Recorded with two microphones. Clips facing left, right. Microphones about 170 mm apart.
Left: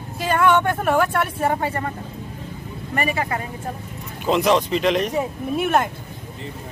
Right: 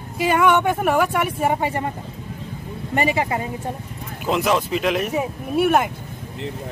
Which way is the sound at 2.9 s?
20° right (ahead or behind).